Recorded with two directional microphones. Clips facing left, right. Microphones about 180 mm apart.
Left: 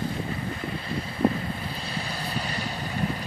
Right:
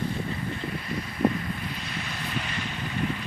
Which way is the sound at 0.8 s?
30° left (ahead or behind).